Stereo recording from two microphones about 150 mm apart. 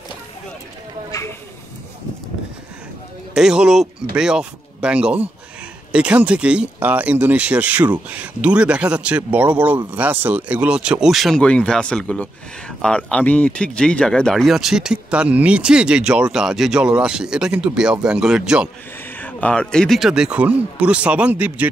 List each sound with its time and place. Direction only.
1.1 s a sound: 25° left (ahead or behind)
3.3 s speech: 5° right (ahead or behind)
19.1 s speech: 10° left (ahead or behind); by 21.6 s 10° right (ahead or behind)